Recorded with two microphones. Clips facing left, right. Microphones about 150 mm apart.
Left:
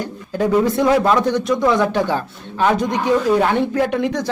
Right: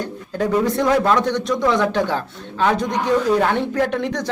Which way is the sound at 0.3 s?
5° left (ahead or behind).